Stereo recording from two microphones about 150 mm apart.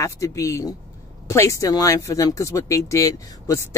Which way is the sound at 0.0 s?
20° left (ahead or behind).